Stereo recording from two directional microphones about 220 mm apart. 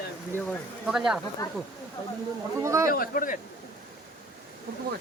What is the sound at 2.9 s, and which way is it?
Speech, 40° left (ahead or behind).